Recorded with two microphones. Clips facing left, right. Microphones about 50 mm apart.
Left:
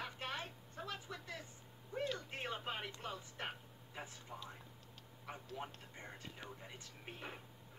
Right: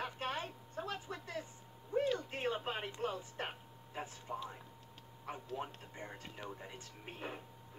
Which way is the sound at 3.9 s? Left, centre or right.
Right.